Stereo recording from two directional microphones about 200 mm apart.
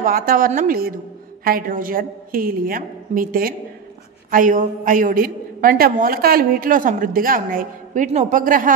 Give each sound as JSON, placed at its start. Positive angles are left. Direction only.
{"t": 0.0, "sound": "a woman's voice", "side_deg": -45}